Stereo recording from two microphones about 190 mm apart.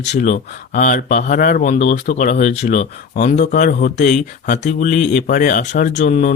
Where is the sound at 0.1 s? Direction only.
45° left (ahead or behind).